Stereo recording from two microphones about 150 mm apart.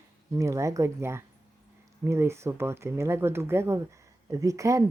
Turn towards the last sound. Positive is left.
turn(degrees=-20)  # may be behind; listen again after turning